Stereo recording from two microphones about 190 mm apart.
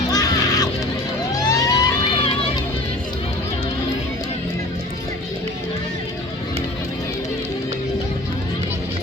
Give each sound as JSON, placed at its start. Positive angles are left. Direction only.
{"t": 0.1, "sound": "music", "side_deg": 20}
{"t": 1.4, "sound": "vehicle", "side_deg": 20}